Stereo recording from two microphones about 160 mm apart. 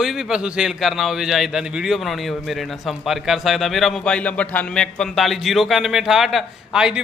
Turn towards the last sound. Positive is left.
turn(degrees=-5)  # may be behind; listen again after turning